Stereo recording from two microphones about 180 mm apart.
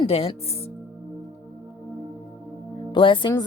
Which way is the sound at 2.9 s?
30° left (ahead or behind).